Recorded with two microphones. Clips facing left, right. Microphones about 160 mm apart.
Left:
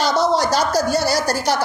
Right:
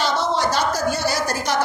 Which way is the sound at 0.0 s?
40° left (ahead or behind).